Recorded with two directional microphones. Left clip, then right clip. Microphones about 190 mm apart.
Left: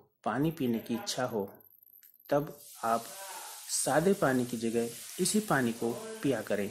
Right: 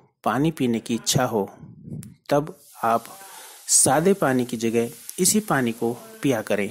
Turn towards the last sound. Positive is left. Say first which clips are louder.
# right 9 dB
turn(degrees=-30)  # may be behind; listen again after turning